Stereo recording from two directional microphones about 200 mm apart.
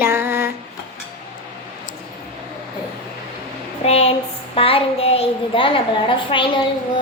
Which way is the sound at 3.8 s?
30° left (ahead or behind).